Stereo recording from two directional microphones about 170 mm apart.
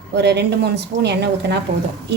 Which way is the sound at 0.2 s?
80° right.